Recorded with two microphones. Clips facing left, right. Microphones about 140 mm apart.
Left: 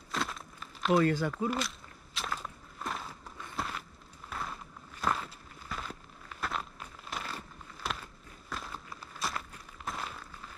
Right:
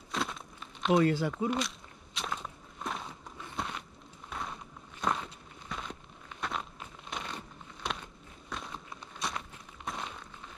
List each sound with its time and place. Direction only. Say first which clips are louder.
0.1 s crumpling: right 1 dB; centre (ahead or behind)
0.9 s speech: right 1 dB; 20° right (ahead or behind)
2.1 s walk: even; centre (ahead or behind)
6.4 s crumpling: even; centre (ahead or behind)
9.8 s a sound: even; centre (ahead or behind)